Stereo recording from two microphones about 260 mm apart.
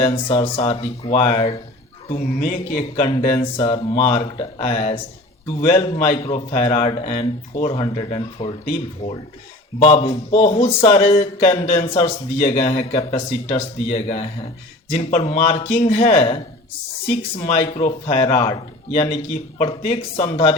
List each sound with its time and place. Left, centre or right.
0.0 s speech: left
9.8 s speech: left
17.4 s speech: left